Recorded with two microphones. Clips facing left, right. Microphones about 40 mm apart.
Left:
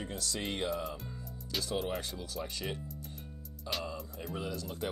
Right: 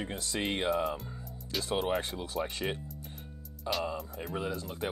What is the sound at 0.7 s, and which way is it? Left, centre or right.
Speech, centre.